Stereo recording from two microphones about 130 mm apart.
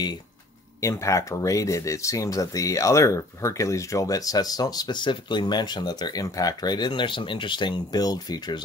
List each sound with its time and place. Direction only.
0.7 s speech: 25° left (ahead or behind)